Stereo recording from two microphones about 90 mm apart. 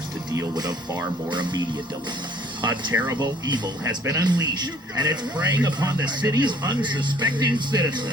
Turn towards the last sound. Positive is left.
turn(degrees=-55)  # may be behind; listen again after turning